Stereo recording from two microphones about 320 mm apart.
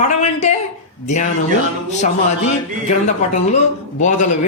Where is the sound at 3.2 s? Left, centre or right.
Left.